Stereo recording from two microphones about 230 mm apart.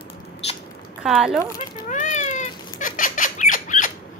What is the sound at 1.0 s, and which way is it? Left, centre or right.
Speech, centre.